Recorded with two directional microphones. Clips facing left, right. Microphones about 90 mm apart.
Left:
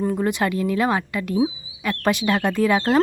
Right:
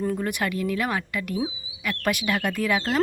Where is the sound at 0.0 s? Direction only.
20° left (ahead or behind).